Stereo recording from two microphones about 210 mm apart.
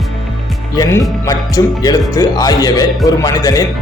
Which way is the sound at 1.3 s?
15° left (ahead or behind).